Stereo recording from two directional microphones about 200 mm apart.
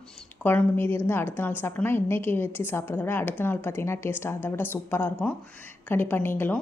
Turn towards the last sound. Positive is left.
turn(degrees=10)  # may be behind; listen again after turning